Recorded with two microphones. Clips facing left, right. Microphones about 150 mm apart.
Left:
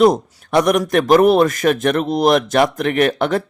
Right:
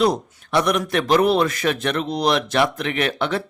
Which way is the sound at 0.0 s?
45° left (ahead or behind).